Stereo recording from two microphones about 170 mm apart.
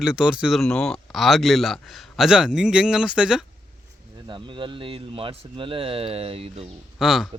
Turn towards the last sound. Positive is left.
turn(degrees=0)  # may be behind; listen again after turning